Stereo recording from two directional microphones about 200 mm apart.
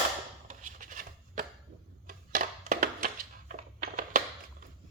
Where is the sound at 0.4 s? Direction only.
40° right (ahead or behind).